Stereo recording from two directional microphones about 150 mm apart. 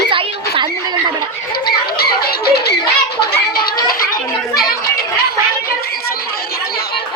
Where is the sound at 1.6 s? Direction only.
90° left.